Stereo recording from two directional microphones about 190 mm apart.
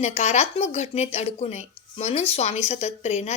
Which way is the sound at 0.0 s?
35° left (ahead or behind).